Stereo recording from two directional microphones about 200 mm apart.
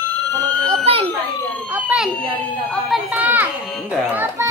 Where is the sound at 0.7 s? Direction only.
30° right (ahead or behind).